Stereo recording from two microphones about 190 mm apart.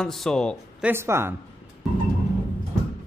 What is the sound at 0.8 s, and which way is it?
Speech, 15° right (ahead or behind).